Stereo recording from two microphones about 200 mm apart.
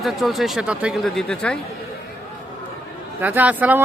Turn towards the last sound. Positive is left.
turn(degrees=-10)  # may be behind; listen again after turning